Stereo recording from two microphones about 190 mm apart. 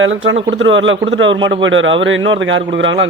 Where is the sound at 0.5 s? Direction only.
80° right.